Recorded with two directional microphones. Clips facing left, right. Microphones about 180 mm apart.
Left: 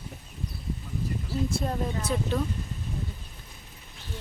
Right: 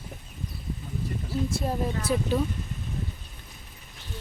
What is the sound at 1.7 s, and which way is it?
Speech, 5° right (ahead or behind).